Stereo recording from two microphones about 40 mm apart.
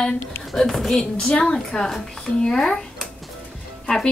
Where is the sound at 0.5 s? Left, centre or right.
Centre.